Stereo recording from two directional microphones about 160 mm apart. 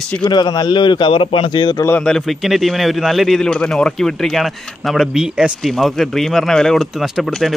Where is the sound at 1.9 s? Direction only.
5° left (ahead or behind).